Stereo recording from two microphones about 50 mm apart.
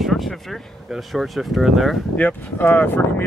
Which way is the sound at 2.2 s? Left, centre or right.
Left.